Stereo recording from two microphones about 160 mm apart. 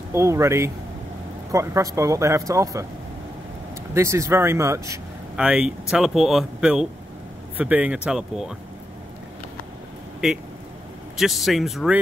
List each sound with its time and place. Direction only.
0.1 s speech: 20° right (ahead or behind)
3.9 s speech: 15° right (ahead or behind)
5.3 s speech: 5° right (ahead or behind)
11.1 s speech: centre (ahead or behind)